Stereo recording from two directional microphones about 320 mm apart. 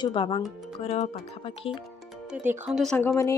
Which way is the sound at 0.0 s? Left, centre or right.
Centre.